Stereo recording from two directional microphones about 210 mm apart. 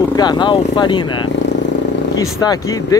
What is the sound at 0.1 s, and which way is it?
Speech, 20° left (ahead or behind).